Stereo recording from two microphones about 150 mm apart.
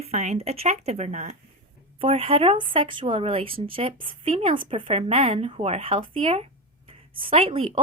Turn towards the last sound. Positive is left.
turn(degrees=-40)  # may be behind; listen again after turning